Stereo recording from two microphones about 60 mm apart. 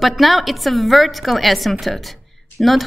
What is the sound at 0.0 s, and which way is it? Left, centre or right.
A woman's voice, centre.